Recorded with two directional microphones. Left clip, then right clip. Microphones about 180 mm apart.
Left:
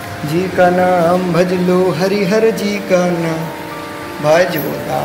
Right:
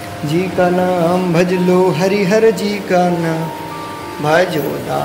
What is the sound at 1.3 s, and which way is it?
Speech, 30° right (ahead or behind).